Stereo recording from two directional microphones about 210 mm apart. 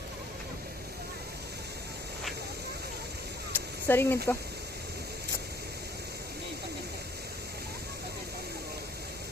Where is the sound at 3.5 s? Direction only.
10° left (ahead or behind).